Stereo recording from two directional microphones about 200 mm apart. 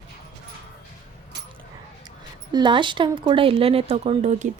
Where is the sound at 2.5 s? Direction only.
25° right (ahead or behind).